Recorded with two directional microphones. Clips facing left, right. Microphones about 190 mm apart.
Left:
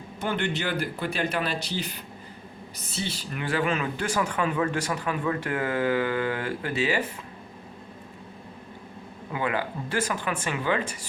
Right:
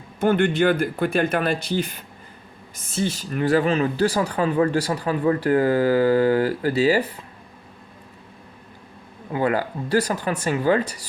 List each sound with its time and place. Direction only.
0.2 s speech: 50° right (ahead or behind); by 7.1 s 35° right (ahead or behind)
9.3 s speech: 40° right (ahead or behind)